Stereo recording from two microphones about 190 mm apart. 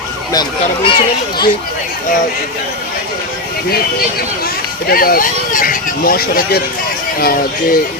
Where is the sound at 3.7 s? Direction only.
55° left (ahead or behind).